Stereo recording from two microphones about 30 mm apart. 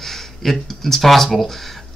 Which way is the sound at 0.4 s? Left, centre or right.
Centre.